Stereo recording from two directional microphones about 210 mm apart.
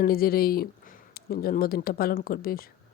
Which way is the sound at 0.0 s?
45° left (ahead or behind).